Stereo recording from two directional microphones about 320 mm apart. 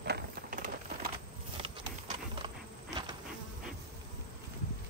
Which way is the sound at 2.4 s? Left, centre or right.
Centre.